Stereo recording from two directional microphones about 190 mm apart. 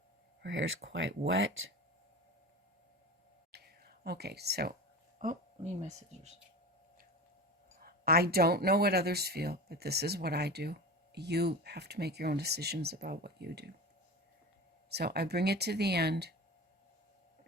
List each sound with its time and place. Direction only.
0.4 s speech: 75° right (ahead or behind)
3.5 s a sound: 55° right (ahead or behind)
5.2 s speech: 40° right (ahead or behind)
7.8 s speech: 55° right (ahead or behind)
14.9 s speech: 60° right (ahead or behind)